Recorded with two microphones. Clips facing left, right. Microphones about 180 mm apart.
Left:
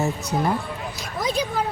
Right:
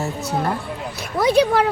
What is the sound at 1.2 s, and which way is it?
Speech, 70° right (ahead or behind).